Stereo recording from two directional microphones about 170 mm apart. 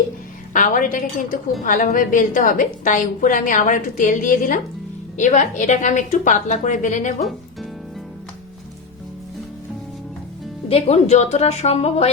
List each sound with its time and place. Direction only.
0.5 s a woman's voice: 50° left (ahead or behind)
10.7 s a woman's voice: 35° left (ahead or behind)